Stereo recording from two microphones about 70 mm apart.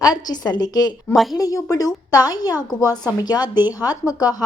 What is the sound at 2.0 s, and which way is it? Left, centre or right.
A woman's voice, left.